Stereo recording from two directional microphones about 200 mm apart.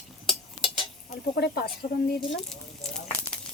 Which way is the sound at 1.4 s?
55° left (ahead or behind).